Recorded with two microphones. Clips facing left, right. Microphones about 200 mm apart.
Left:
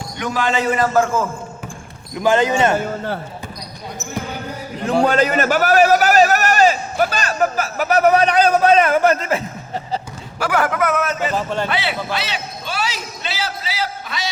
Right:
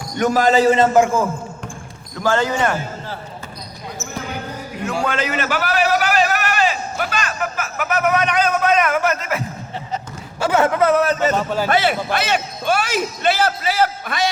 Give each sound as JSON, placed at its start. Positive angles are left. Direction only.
{"t": 0.2, "sound": "a man's voice", "side_deg": -40}
{"t": 0.9, "sound": "a man's voice", "side_deg": -15}
{"t": 2.1, "sound": "speech", "side_deg": 20}
{"t": 4.9, "sound": "a sound", "side_deg": 35}
{"t": 10.4, "sound": "a man's voice", "side_deg": -25}
{"t": 11.3, "sound": "a man's voice", "side_deg": -5}
{"t": 11.7, "sound": "a man's voice", "side_deg": -45}